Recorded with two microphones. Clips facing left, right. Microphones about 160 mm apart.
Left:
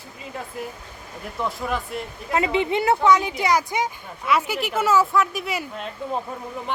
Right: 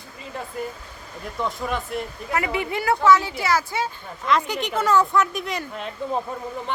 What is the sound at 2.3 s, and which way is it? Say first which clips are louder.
Speech: left 4 dB; 20° left (ahead or behind).